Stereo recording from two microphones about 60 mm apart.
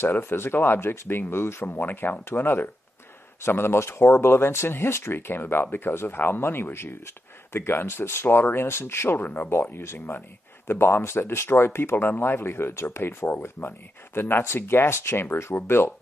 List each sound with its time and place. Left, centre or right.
0.0 s speech: left
9.2 s speech: left
9.5 s speech: left